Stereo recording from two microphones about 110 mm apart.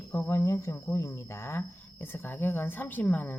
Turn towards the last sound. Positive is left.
turn(degrees=15)  # may be behind; listen again after turning